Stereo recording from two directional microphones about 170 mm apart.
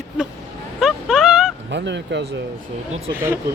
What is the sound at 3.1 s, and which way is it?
Speech, 15° right (ahead or behind).